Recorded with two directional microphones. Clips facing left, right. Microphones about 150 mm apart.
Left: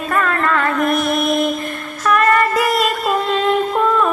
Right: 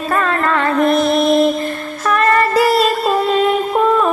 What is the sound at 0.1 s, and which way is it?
Music, 30° right (ahead or behind).